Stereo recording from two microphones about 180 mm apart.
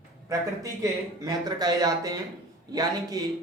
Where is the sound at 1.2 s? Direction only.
20° right (ahead or behind).